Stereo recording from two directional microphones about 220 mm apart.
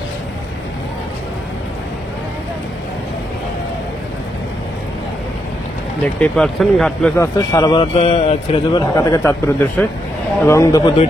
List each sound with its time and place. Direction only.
6.1 s speech: 5° left (ahead or behind)
7.2 s speech: 15° left (ahead or behind)
8.9 s a man's voice: 15° left (ahead or behind)